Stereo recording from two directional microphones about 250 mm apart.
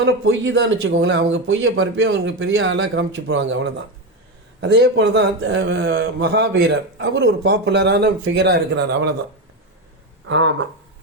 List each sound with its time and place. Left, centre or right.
0.0 s a man's voice: right
10.2 s a man's voice: right